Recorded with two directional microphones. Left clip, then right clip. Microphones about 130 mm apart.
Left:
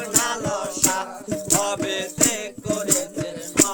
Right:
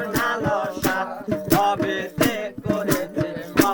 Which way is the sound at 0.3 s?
40° left (ahead or behind).